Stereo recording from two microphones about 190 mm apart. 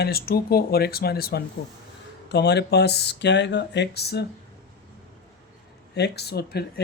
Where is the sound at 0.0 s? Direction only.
55° left (ahead or behind).